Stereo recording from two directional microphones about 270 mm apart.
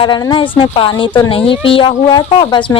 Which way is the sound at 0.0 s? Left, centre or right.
Centre.